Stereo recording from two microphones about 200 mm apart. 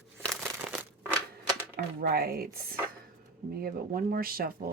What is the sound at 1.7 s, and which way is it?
Speech, 50° right (ahead or behind).